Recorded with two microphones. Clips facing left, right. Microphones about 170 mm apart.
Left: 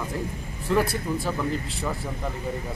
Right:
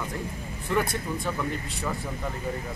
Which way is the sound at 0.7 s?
5° left (ahead or behind).